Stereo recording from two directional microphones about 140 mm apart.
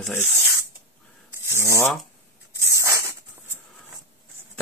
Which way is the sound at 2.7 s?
20° right (ahead or behind).